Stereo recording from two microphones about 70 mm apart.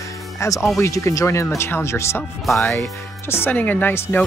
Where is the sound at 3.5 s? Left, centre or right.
Left.